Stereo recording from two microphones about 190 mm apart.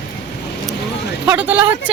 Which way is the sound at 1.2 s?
10° right (ahead or behind).